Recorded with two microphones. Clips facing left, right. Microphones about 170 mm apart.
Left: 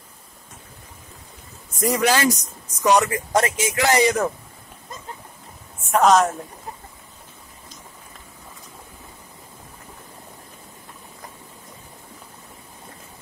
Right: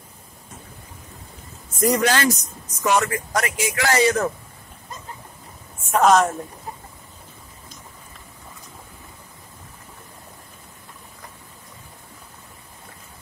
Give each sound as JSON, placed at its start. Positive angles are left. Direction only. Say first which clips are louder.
{"t": 1.8, "sound": "speech", "louder": "even", "side_deg": 0}
{"t": 5.9, "sound": "a woman's voice", "louder": "even", "side_deg": 0}